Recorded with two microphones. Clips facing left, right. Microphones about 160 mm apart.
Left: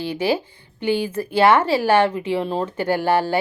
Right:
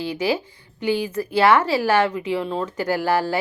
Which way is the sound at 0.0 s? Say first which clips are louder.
Left 1 dB; 30° left (ahead or behind).